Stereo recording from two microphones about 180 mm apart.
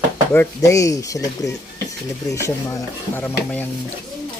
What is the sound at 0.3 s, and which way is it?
Speech, 15° left (ahead or behind).